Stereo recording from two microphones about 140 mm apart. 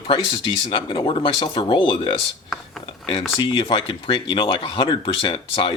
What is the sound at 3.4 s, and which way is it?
Speech, 40° left (ahead or behind).